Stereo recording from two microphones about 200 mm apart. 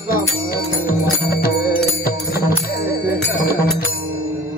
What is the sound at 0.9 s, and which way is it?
Music, 45° left (ahead or behind).